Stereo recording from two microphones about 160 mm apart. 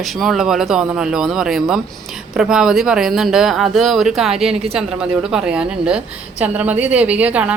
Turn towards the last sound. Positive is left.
turn(degrees=-10)  # may be behind; listen again after turning